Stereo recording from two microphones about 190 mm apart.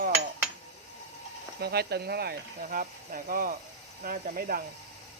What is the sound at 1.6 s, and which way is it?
Speech, 55° right (ahead or behind).